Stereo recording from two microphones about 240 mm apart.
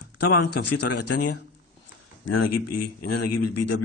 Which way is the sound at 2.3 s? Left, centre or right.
Left.